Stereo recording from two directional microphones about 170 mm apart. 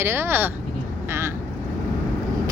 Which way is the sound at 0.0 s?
15° right (ahead or behind).